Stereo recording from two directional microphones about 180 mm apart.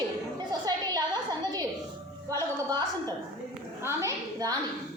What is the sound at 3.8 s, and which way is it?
Speech, 20° right (ahead or behind).